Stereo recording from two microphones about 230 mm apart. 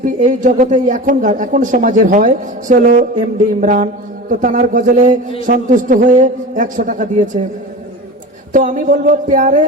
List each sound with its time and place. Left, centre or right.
0.0 s speech: right
8.5 s speech: right